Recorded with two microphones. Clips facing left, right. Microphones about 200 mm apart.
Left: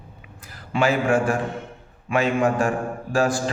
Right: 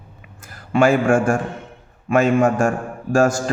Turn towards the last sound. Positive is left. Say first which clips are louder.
# right 5 dB
turn(degrees=-45)  # may be behind; listen again after turning